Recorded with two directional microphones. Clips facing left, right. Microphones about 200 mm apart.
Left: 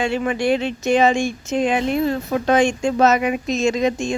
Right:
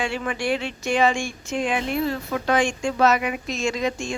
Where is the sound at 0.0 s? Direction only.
25° left (ahead or behind).